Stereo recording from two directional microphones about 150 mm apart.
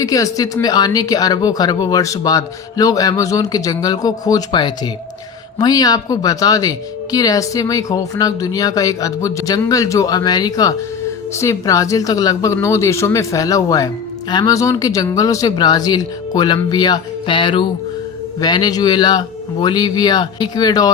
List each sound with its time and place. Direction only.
0.0 s speech: 25° left (ahead or behind)